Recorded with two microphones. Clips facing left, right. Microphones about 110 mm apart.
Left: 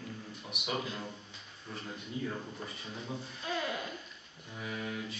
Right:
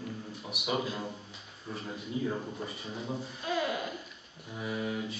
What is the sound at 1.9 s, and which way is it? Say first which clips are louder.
Speech: right 5 dB; 20° right (ahead or behind).